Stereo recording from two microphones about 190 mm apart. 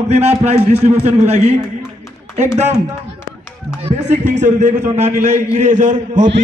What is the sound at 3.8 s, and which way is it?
A man's voice, 35° right (ahead or behind).